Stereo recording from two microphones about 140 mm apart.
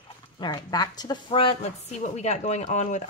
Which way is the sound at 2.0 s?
50° left (ahead or behind).